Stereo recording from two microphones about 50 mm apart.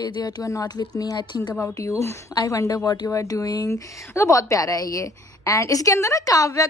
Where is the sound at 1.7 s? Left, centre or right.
Left.